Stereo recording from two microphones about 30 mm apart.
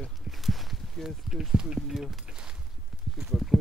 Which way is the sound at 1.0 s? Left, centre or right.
Centre.